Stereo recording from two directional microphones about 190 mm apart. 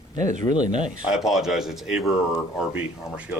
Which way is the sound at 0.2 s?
40° right (ahead or behind).